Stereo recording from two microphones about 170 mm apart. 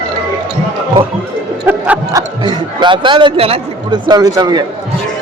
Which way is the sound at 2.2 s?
25° right (ahead or behind).